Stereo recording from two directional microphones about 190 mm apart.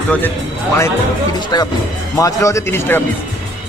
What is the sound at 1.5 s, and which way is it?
Speech, 20° left (ahead or behind).